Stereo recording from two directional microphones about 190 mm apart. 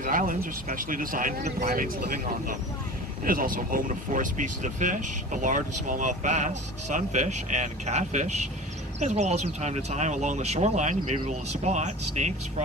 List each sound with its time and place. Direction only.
0.0 s speech: 45° right (ahead or behind)